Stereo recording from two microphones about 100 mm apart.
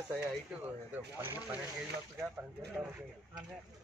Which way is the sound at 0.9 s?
20° right (ahead or behind).